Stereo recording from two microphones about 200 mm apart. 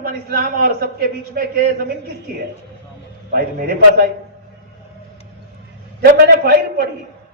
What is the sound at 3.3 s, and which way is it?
Speech, 50° right (ahead or behind).